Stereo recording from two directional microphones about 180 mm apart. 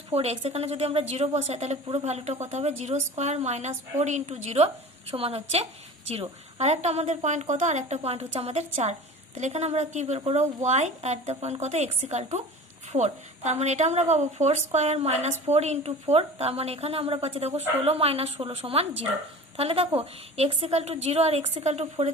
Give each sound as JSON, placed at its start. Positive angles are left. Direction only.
{"t": 0.1, "sound": "a woman's voice", "side_deg": -35}